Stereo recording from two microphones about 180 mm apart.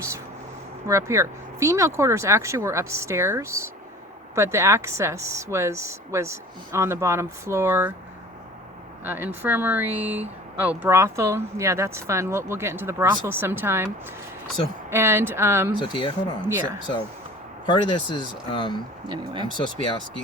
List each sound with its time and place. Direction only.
0.9 s speech: 15° right (ahead or behind)
9.0 s speech: 10° right (ahead or behind)
15.8 s speech: 25° left (ahead or behind)
17.7 s speech: 25° left (ahead or behind)
19.0 s speech: 25° right (ahead or behind)
19.5 s speech: 25° left (ahead or behind)